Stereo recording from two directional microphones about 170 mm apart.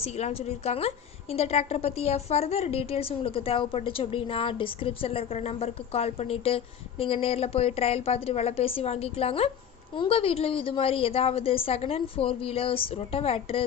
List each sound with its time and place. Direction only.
0.0 s a woman's voice: 40° left (ahead or behind)